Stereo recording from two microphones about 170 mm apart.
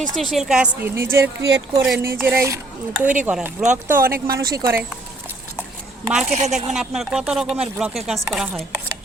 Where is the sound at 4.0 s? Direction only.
60° right (ahead or behind).